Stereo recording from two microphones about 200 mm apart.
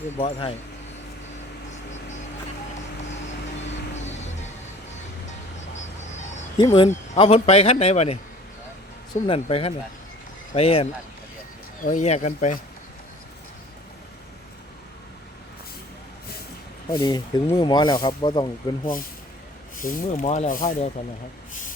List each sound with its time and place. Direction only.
0.2 s speech: 30° left (ahead or behind)
6.6 s speech: 30° left (ahead or behind)
9.2 s speech: 30° left (ahead or behind)
11.8 s speech: 40° left (ahead or behind)
16.9 s speech: 20° left (ahead or behind)
19.7 s speech: 40° left (ahead or behind)